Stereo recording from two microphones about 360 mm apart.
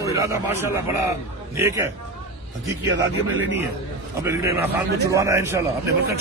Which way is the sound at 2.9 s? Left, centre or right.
Right.